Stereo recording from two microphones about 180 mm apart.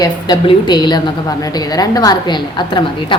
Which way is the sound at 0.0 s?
25° left (ahead or behind).